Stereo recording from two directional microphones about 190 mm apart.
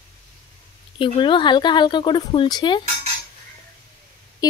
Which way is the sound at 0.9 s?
25° left (ahead or behind).